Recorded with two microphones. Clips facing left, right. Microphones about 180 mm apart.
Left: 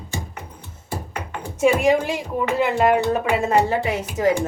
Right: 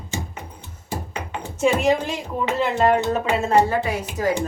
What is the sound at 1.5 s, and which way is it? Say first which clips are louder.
A woman's voice: left 2 dB; 10° left (ahead or behind).